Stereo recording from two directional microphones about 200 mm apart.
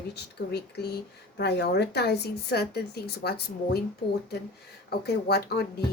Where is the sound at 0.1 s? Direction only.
55° left (ahead or behind).